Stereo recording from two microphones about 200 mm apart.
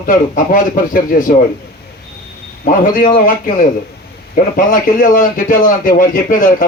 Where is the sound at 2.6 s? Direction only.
40° left (ahead or behind).